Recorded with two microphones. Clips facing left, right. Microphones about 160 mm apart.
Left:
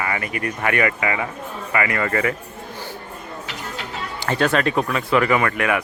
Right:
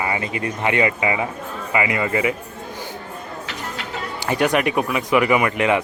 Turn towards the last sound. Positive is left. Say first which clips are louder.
# right 2 dB
turn(degrees=-20)  # may be behind; listen again after turning